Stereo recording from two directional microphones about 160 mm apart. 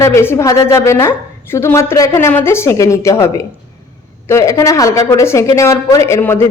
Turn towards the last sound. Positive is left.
turn(degrees=15)  # may be behind; listen again after turning